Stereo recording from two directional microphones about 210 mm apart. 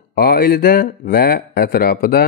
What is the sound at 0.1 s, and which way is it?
Speech, 45° left (ahead or behind).